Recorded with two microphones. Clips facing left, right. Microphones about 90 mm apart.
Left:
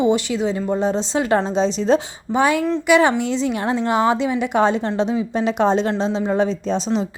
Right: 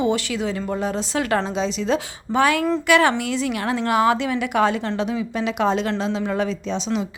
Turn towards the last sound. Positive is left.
turn(degrees=40)  # may be behind; listen again after turning